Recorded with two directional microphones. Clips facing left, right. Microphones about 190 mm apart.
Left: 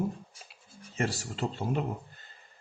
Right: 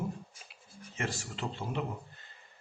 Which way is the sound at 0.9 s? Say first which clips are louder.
Left 5 dB; 40° left (ahead or behind).